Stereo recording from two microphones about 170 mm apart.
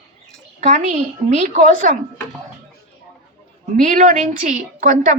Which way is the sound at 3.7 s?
50° right (ahead or behind).